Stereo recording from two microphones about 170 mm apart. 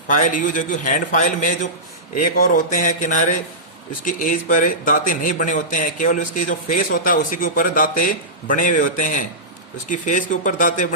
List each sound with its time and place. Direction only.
0.1 s speech: 50° left (ahead or behind)